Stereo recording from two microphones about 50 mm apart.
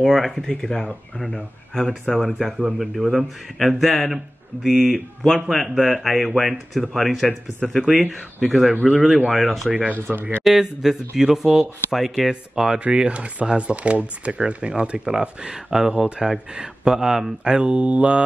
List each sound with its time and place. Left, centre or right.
0.0 s speech: centre
9.7 s speech: right
10.4 s speech: centre; by 18.2 s right